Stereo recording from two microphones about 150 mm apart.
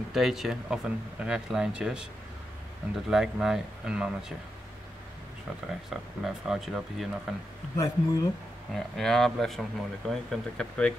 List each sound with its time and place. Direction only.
0.1 s speech: centre (ahead or behind)
3.1 s speech: 5° right (ahead or behind)
6.2 s speech: centre (ahead or behind)
7.7 s speech: 25° left (ahead or behind)
8.7 s speech: centre (ahead or behind)